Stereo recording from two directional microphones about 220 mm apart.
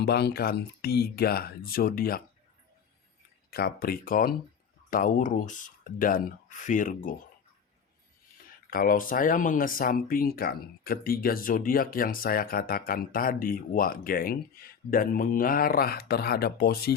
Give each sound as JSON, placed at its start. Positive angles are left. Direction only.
{"t": 0.0, "sound": "speech", "side_deg": 50}
{"t": 3.5, "sound": "speech", "side_deg": 45}
{"t": 8.7, "sound": "speech", "side_deg": 40}